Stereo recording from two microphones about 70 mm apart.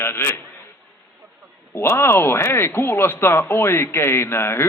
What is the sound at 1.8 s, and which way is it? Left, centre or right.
Speech, left.